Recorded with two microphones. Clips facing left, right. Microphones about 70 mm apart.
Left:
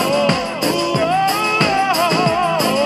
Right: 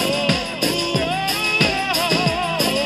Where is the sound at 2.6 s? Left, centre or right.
Left.